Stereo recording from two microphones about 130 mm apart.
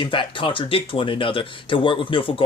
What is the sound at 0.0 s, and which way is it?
Speech, 40° left (ahead or behind).